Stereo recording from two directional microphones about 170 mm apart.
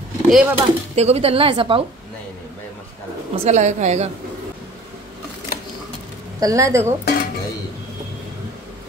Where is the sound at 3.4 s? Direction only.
45° right (ahead or behind).